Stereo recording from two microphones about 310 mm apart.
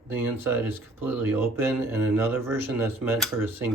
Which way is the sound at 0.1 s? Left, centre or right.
Centre.